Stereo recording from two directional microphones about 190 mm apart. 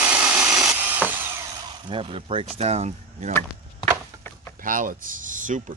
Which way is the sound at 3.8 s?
10° left (ahead or behind).